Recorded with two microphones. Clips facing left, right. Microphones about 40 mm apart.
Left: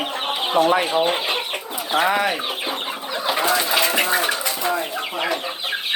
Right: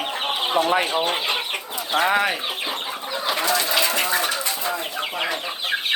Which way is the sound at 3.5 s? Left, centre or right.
Centre.